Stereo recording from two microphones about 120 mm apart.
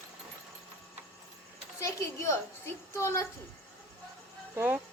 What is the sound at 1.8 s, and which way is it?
A woman's voice, 25° left (ahead or behind).